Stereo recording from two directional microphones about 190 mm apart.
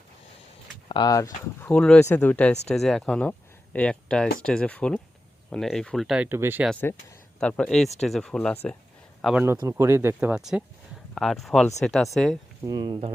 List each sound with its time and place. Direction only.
0.9 s speech: 20° left (ahead or behind)
1.6 s speech: 5° left (ahead or behind); by 6.7 s 10° right (ahead or behind)
6.7 s speech: 10° left (ahead or behind)
9.2 s speech: 10° right (ahead or behind)
12.6 s speech: 20° right (ahead or behind)